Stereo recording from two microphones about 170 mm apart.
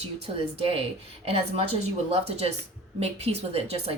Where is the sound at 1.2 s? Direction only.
35° right (ahead or behind).